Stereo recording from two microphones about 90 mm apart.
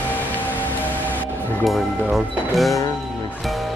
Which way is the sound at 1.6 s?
Centre (ahead or behind).